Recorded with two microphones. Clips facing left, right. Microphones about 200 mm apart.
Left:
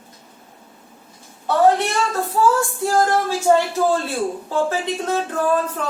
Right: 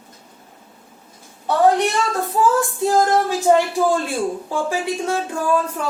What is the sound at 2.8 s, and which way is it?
Speech, 15° right (ahead or behind).